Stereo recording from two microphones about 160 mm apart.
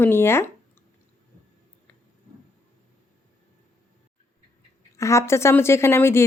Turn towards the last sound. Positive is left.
turn(degrees=15)  # may be behind; listen again after turning